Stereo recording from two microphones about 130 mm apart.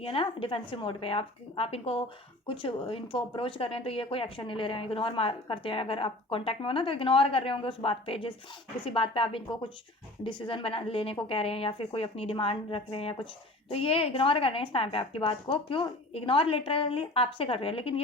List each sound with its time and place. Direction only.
0.0 s speech: 45° left (ahead or behind)